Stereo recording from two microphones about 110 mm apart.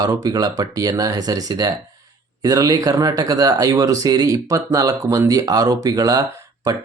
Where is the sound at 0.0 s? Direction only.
35° right (ahead or behind).